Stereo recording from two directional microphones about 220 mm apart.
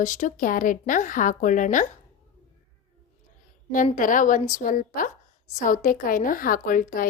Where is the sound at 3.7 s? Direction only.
35° left (ahead or behind).